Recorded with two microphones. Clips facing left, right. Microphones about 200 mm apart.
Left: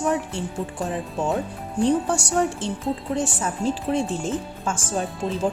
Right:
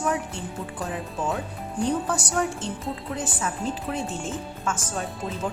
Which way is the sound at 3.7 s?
30° left (ahead or behind).